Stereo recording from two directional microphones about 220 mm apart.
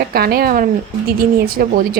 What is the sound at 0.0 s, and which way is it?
Speech, 45° right (ahead or behind).